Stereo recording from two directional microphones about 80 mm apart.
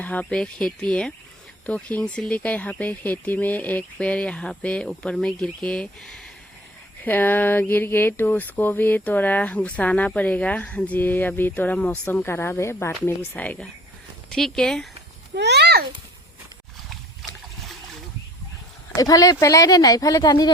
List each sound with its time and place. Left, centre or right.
0.0 s speech: centre
7.0 s a sound: left
12.0 s a woman's voice: left
13.1 s a sound: centre
14.3 s speech: centre
18.9 s speech: left